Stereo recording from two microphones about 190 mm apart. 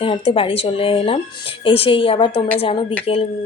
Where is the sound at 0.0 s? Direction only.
30° left (ahead or behind).